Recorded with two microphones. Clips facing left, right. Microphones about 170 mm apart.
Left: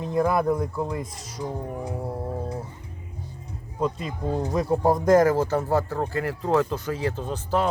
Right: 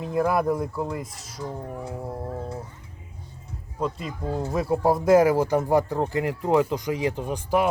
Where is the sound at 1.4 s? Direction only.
15° left (ahead or behind).